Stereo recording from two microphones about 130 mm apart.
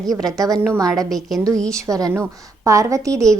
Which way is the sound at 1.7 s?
25° right (ahead or behind).